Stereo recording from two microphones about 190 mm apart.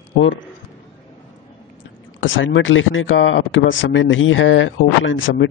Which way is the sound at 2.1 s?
85° left.